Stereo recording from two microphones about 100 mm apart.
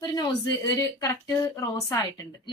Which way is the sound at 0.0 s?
40° left (ahead or behind).